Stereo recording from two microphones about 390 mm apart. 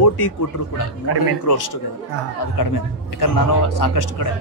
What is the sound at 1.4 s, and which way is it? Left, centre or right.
Speech, left.